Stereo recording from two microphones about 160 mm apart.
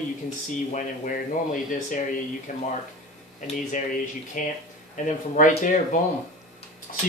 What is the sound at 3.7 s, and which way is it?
Speech, 55° left (ahead or behind).